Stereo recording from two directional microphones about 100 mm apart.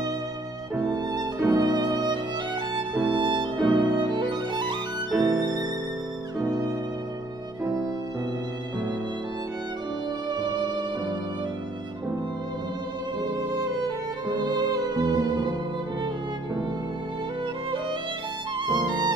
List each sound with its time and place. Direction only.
0.7 s music: 45° right (ahead or behind)
5.1 s music: 35° right (ahead or behind)
7.6 s music: 40° right (ahead or behind)
14.4 s music: 45° right (ahead or behind)
18.7 s violin: 45° right (ahead or behind)